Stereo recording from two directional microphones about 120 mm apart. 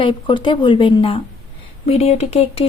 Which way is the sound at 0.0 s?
45° left (ahead or behind).